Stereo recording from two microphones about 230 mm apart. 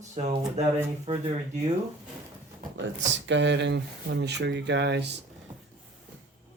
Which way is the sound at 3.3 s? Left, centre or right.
Right.